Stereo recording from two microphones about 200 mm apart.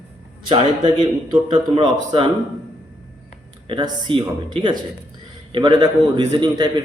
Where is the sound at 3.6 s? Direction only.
25° right (ahead or behind).